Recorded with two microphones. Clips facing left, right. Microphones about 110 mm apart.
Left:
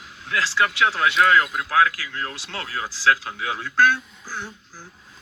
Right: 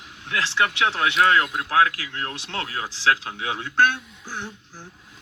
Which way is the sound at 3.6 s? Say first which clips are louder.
Left 1 dB; 60° right (ahead or behind).